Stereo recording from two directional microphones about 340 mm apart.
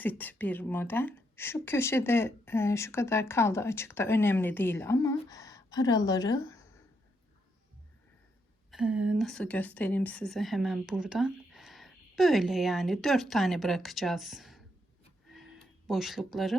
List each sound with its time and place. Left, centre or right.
0.0 s speech: centre
8.7 s a woman's voice: centre
15.3 s a sound: centre